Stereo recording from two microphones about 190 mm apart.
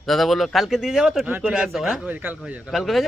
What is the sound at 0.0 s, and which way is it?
Speech, centre (ahead or behind).